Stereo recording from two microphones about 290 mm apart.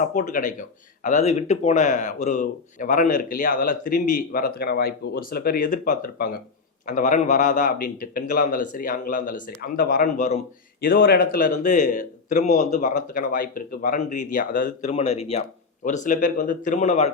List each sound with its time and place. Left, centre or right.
0.0 s speech: left